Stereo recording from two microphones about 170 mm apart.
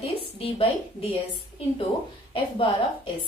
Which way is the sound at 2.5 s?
30° left (ahead or behind).